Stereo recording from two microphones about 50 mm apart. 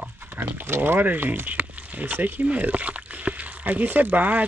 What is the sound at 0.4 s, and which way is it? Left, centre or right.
Speech, right.